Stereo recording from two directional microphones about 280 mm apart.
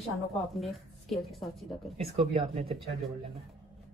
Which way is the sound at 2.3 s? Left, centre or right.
Right.